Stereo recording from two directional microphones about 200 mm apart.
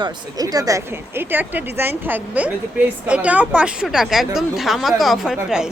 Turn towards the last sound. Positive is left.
turn(degrees=0)  # may be behind; listen again after turning